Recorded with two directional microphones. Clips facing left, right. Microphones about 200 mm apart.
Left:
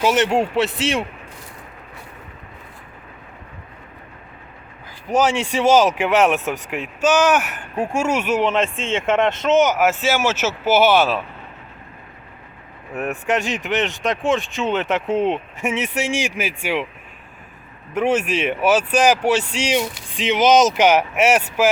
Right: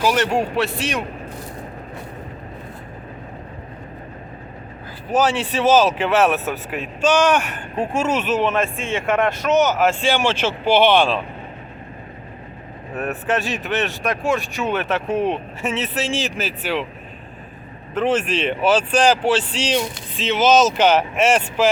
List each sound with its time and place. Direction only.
0.0 s speech: 25° left (ahead or behind)
5.0 s speech: 10° left (ahead or behind)
12.9 s speech: 10° left (ahead or behind)
17.9 s speech: 10° left (ahead or behind)